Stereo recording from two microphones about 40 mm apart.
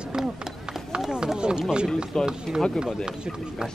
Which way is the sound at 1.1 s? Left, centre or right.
Right.